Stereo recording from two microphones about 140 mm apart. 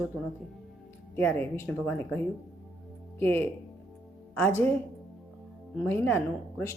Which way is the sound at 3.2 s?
15° left (ahead or behind).